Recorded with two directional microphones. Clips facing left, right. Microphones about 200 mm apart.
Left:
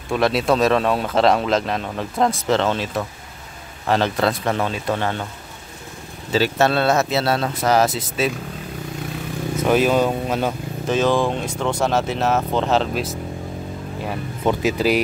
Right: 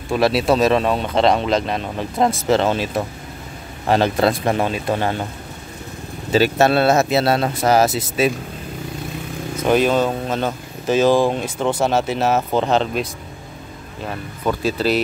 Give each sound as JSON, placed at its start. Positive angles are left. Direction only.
{"t": 0.1, "sound": "speech", "side_deg": -5}
{"t": 3.9, "sound": "speech", "side_deg": -15}
{"t": 6.3, "sound": "speech", "side_deg": -10}
{"t": 9.6, "sound": "speech", "side_deg": 5}
{"t": 11.1, "sound": "speech", "side_deg": -5}
{"t": 14.4, "sound": "speech", "side_deg": 15}